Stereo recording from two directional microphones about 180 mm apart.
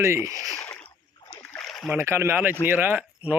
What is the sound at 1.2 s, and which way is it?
Splash, 20° left (ahead or behind).